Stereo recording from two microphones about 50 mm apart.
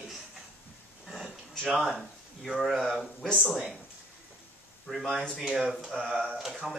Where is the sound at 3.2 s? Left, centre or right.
Centre.